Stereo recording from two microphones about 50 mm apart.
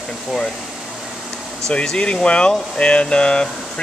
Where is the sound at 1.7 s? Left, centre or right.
Centre.